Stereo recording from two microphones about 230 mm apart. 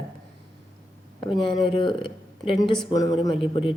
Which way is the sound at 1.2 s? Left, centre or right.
Left.